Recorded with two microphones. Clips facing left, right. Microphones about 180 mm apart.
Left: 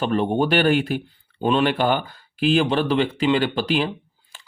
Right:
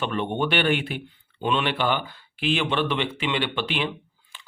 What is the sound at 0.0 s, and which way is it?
Speech, 40° left (ahead or behind).